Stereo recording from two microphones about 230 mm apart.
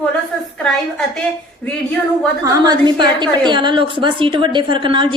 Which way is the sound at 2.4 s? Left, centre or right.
Centre.